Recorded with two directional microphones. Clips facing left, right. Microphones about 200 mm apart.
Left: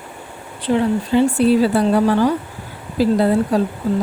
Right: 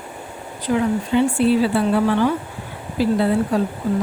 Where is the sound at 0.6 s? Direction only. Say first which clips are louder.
Left 2 dB; 30° left (ahead or behind).